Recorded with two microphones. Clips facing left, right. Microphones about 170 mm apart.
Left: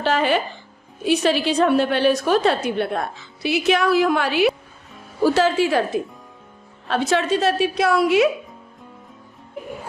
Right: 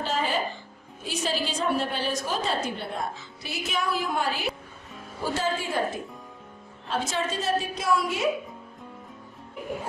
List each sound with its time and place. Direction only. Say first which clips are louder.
0.0 s music: left 8 dB; 70° left (ahead or behind)
1.0 s a woman's voice: left 11 dB; 70° left (ahead or behind)
6.9 s a woman's voice: left 9 dB; 70° left (ahead or behind)